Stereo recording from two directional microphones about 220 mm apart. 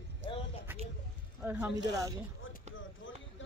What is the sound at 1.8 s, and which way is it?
Speech, 15° right (ahead or behind).